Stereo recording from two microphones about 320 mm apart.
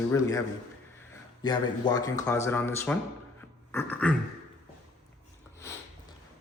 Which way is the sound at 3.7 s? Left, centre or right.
Centre.